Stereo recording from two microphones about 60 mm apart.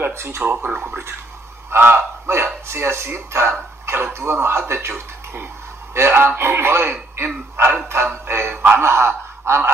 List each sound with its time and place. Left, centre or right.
0.0 s speech: right
0.4 s a man's voice: right
8.3 s music: right
8.7 s snicker: right